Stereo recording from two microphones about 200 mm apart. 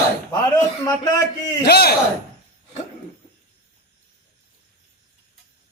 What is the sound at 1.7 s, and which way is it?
Speech, 50° left (ahead or behind).